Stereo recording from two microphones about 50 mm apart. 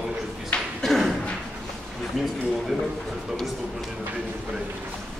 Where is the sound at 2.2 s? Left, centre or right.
Centre.